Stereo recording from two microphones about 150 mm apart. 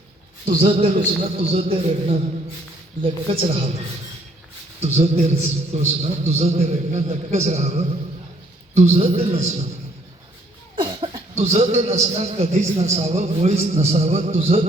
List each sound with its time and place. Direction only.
0.4 s a man's voice: 35° right (ahead or behind)
4.8 s a man's voice: 45° right (ahead or behind)
10.8 s cough: 30° right (ahead or behind)
11.3 s a man's voice: 50° right (ahead or behind)